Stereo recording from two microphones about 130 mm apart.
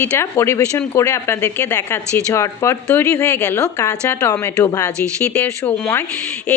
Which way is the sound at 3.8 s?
20° left (ahead or behind).